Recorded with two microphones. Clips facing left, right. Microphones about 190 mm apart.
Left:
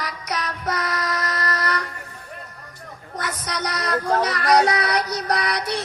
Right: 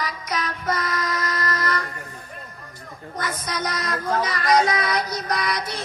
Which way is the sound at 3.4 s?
70° left (ahead or behind).